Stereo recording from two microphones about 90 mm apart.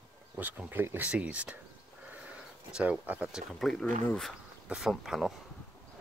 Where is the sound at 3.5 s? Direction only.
5° left (ahead or behind).